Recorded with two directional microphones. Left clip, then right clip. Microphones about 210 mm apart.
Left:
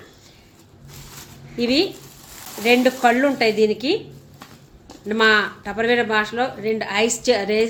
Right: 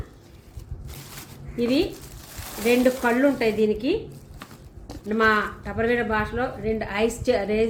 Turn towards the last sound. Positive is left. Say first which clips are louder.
# left 4 dB
turn(degrees=45)  # may be behind; listen again after turning